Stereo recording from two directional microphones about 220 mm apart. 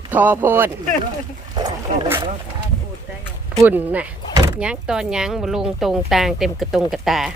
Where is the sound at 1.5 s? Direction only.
15° right (ahead or behind).